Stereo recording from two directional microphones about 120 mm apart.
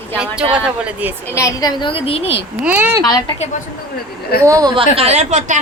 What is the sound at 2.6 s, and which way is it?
Speech, 15° right (ahead or behind).